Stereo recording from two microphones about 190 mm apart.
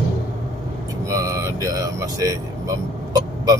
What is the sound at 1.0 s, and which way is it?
Speech, 20° right (ahead or behind).